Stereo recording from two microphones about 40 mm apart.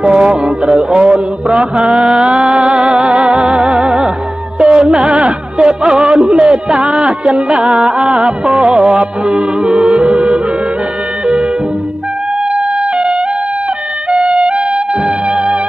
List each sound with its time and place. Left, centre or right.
0.1 s music: centre
0.9 s music: right
1.8 s mantra: right
2.3 s music: centre
4.6 s music: right
4.9 s music: centre
10.0 s music: right
12.9 s music: centre